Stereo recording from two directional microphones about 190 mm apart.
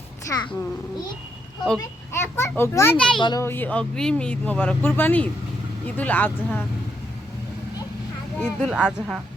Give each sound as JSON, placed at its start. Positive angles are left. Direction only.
{"t": 0.3, "sound": "a child's voice", "side_deg": 20}
{"t": 2.2, "sound": "speech", "side_deg": 10}
{"t": 3.2, "sound": "a child's voice", "side_deg": 25}
{"t": 3.4, "sound": "speech", "side_deg": 10}
{"t": 8.4, "sound": "speech", "side_deg": -5}